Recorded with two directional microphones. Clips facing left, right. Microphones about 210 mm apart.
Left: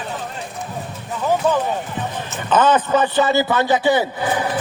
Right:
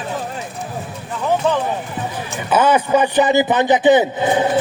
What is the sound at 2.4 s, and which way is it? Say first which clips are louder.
A man's voice: right 1 dB; 10° right (ahead or behind).